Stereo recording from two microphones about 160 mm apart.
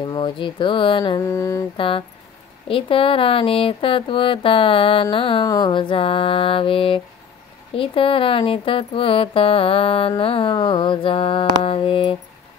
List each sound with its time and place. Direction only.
0.0 s speech: 30° left (ahead or behind)
1.2 s mantra: 20° left (ahead or behind)
1.8 s speech: 35° left (ahead or behind)